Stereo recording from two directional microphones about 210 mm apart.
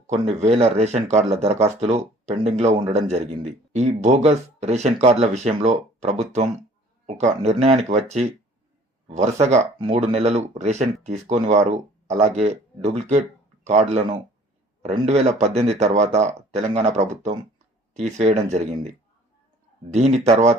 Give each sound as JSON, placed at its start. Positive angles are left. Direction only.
{"t": 0.1, "sound": "speech", "side_deg": -30}